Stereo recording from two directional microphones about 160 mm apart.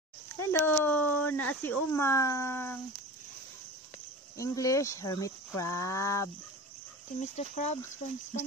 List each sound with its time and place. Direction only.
0.4 s speech: 15° left (ahead or behind)
4.4 s speech: 20° left (ahead or behind)
7.2 s speech: 45° left (ahead or behind)